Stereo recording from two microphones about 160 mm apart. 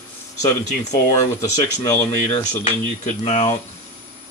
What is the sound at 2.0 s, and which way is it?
Speech, 45° left (ahead or behind).